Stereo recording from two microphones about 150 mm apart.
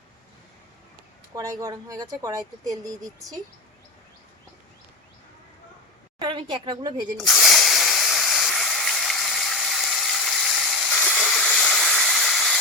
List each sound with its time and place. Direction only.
1.4 s speech: 25° right (ahead or behind)
6.1 s a woman's voice: 30° right (ahead or behind)
7.2 s a sound: centre (ahead or behind)